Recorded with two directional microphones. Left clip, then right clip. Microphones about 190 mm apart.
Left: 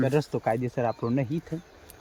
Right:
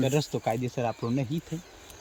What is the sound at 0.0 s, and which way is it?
A man's voice, 5° left (ahead or behind).